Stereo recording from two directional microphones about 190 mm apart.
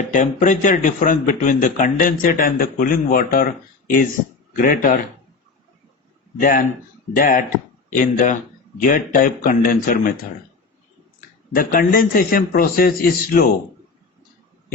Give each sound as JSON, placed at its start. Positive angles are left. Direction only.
{"t": 0.1, "sound": "speech", "side_deg": 40}
{"t": 4.5, "sound": "speech", "side_deg": 45}
{"t": 6.4, "sound": "speech", "side_deg": 45}
{"t": 11.5, "sound": "speech", "side_deg": 50}